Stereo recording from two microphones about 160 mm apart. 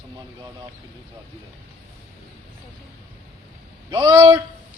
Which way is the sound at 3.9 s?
30° right (ahead or behind).